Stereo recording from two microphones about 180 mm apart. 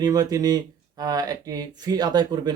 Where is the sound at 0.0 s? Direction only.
20° right (ahead or behind).